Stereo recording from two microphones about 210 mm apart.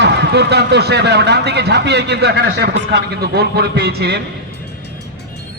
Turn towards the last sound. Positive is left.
turn(degrees=-50)  # may be behind; listen again after turning